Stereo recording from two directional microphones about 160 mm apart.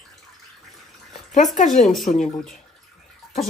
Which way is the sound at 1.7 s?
Centre (ahead or behind).